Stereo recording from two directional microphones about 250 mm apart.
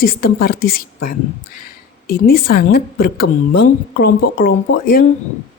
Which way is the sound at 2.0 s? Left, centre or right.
Left.